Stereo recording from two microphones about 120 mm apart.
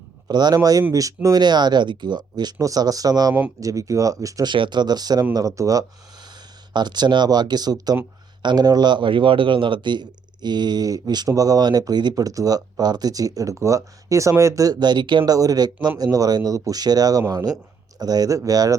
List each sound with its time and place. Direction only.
0.3 s speech: 35° right (ahead or behind)
4.5 s speech: 40° right (ahead or behind)